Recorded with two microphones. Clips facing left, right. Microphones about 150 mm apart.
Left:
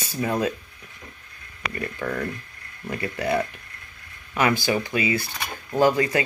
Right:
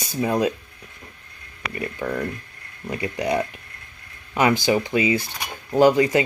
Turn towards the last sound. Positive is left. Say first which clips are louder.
# right 4 dB
turn(degrees=-20)  # may be behind; listen again after turning